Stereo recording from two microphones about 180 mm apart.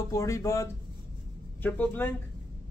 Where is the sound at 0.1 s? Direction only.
15° left (ahead or behind).